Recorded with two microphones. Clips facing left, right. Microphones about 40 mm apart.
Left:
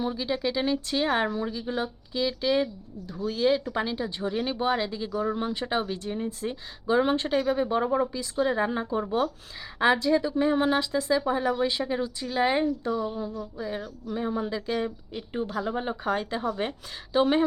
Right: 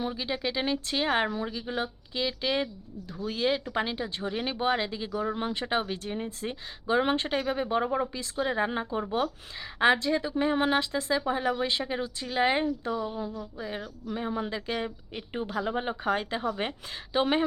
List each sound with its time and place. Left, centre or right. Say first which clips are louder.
0.0 s speech: left 3 dB; centre
13.6 s a woman's voice: left 4 dB; centre
15.4 s speech: right 1 dB; centre